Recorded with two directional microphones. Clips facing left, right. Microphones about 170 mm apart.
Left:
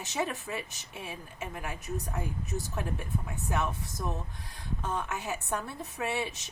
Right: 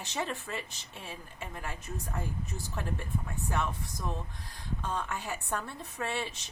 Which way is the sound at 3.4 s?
20° left (ahead or behind).